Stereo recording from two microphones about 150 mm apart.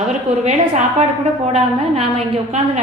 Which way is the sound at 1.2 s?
45° right (ahead or behind).